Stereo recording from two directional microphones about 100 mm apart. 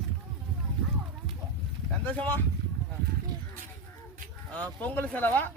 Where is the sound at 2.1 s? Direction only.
15° left (ahead or behind).